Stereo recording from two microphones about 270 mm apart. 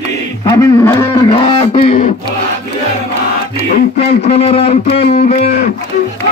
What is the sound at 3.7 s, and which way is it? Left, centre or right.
Speech, left.